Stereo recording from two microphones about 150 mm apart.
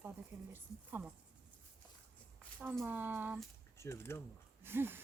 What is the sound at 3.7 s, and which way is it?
Speech, 20° left (ahead or behind).